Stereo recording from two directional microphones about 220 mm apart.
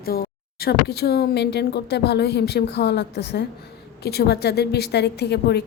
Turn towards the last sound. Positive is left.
turn(degrees=50)  # may be behind; listen again after turning